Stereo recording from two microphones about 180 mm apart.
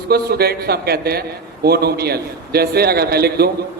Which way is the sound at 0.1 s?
60° right (ahead or behind).